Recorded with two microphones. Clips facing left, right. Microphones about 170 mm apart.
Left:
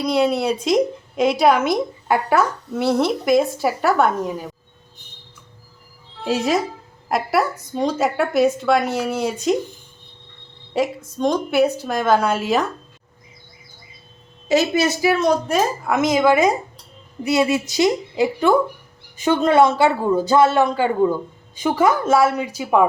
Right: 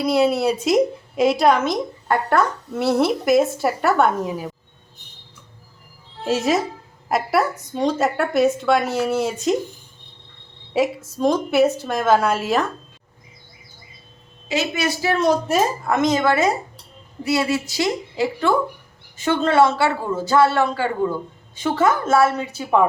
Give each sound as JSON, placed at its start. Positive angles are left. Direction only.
{"t": 0.0, "sound": "a woman's voice", "side_deg": -5}
{"t": 6.2, "sound": "a woman's voice", "side_deg": 0}
{"t": 10.8, "sound": "a woman's voice", "side_deg": -5}
{"t": 14.4, "sound": "a woman's voice", "side_deg": 35}
{"t": 15.1, "sound": "a woman's voice", "side_deg": 0}